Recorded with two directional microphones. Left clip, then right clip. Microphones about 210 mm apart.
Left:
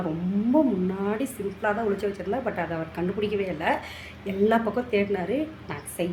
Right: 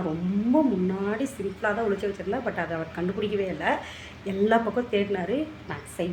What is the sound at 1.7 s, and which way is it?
A woman's voice, 5° left (ahead or behind).